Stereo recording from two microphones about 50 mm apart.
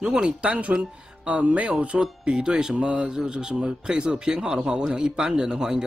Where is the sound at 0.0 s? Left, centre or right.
Centre.